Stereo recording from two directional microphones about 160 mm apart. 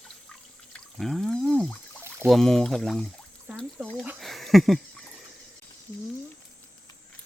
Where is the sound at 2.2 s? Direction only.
Centre (ahead or behind).